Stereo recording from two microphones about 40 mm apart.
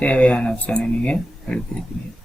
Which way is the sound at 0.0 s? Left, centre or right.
Left.